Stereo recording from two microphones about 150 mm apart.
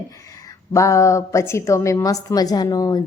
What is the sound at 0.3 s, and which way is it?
Speech, 20° left (ahead or behind).